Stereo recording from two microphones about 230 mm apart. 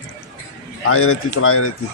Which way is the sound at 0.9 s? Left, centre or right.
Left.